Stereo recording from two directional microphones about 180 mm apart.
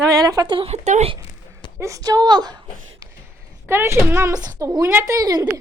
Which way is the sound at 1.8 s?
20° right (ahead or behind).